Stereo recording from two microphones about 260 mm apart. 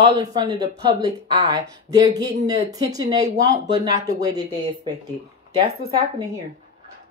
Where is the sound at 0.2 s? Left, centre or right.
Centre.